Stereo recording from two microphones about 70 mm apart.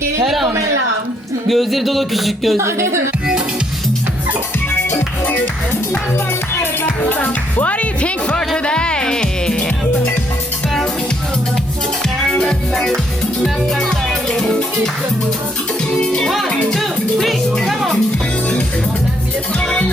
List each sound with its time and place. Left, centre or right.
0.3 s a sound: centre
2.6 s speech: right
4.9 s music: left
6.5 s music: left
7.1 s speech: left
8.4 s music: centre
12.3 s music: centre
16.0 s speech: centre
16.5 s a sound: centre
17.5 s speech: centre
19.5 s music: centre